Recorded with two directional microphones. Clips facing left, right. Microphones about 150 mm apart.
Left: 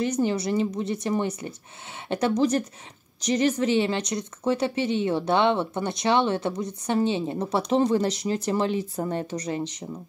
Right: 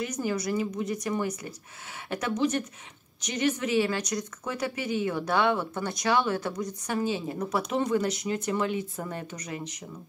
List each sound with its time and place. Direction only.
0.0 s speech: 30° left (ahead or behind)